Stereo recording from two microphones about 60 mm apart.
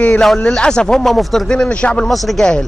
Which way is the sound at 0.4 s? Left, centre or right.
Centre.